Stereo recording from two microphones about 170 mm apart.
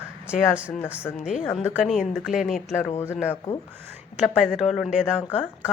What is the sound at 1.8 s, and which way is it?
Speech, centre (ahead or behind).